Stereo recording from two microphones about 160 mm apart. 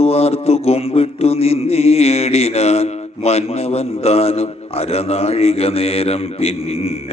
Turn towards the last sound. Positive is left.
turn(degrees=40)  # may be behind; listen again after turning